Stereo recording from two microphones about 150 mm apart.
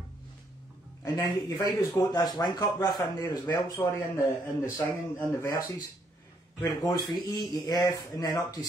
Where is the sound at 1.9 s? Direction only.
25° left (ahead or behind).